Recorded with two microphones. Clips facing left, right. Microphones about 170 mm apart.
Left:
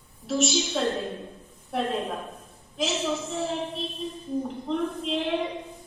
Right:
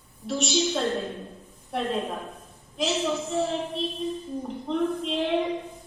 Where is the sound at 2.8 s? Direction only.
Centre (ahead or behind).